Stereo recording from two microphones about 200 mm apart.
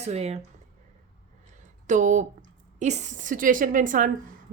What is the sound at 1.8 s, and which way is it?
A woman's voice, 40° right (ahead or behind).